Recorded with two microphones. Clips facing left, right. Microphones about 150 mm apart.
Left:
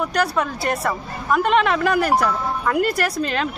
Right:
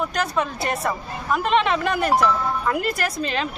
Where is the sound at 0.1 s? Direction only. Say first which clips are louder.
Left 3 dB; 25° right (ahead or behind).